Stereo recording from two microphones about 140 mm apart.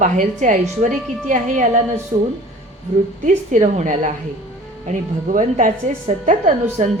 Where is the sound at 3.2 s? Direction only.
60° right (ahead or behind).